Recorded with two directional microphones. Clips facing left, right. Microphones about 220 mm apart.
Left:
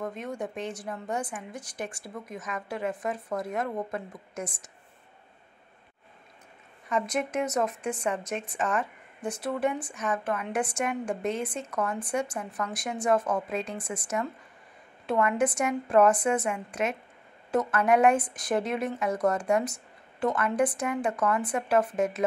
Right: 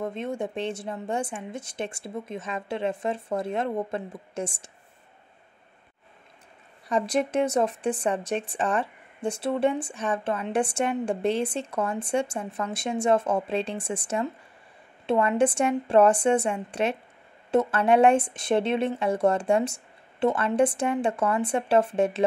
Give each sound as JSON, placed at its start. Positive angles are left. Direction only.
{"t": 0.0, "sound": "speech", "side_deg": -25}
{"t": 6.9, "sound": "speech", "side_deg": -35}